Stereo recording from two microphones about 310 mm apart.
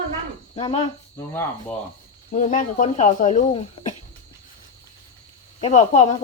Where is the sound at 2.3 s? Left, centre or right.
Left.